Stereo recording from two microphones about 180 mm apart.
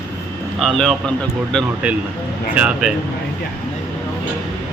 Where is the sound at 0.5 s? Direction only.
Centre (ahead or behind).